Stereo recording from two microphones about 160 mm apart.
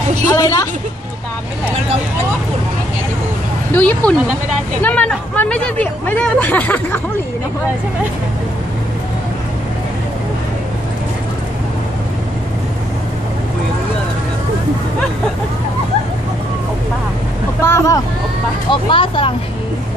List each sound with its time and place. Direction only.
0.3 s a woman's voice: 20° left (ahead or behind)
3.7 s speech: 10° left (ahead or behind)
17.6 s speech: 15° left (ahead or behind)
18.7 s speech: 35° left (ahead or behind)